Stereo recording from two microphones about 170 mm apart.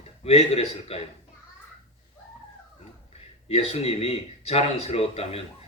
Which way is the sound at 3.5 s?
35° left (ahead or behind).